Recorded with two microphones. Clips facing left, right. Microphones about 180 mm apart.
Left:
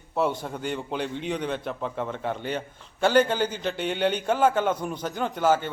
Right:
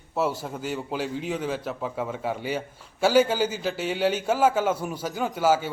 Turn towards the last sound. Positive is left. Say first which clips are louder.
# even
turn(degrees=-5)  # may be behind; listen again after turning